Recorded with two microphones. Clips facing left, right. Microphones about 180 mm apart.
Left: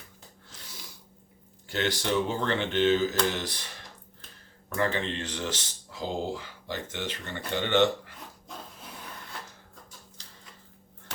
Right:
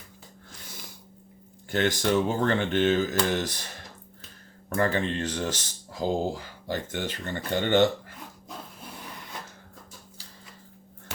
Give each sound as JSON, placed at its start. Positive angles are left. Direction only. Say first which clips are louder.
{"t": 1.7, "sound": "speech", "louder": "right 4 dB", "side_deg": -50}
{"t": 4.7, "sound": "speech", "louder": "right 3 dB", "side_deg": -45}